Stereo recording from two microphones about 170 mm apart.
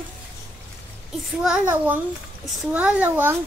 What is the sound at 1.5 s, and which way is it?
A child's voice, 10° right (ahead or behind).